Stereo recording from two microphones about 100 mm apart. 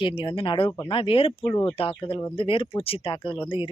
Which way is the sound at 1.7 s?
65° left (ahead or behind).